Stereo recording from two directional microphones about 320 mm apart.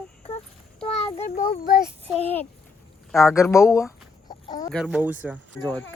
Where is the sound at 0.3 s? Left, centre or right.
Centre.